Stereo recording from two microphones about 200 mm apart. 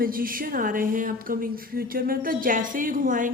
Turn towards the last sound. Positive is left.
turn(degrees=-40)  # may be behind; listen again after turning